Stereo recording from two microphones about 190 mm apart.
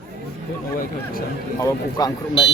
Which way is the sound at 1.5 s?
15° left (ahead or behind).